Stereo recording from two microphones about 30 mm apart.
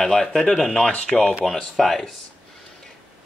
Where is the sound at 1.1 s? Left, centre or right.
Left.